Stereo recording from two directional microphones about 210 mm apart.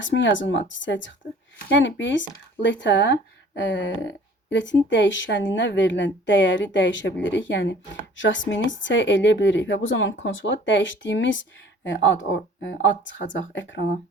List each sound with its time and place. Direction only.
0.0 s speech: 60° left (ahead or behind)